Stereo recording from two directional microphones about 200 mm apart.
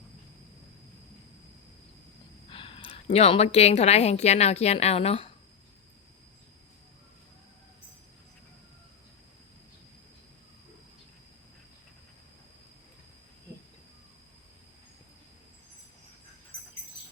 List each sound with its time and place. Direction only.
2.5 s a woman's voice: 25° left (ahead or behind)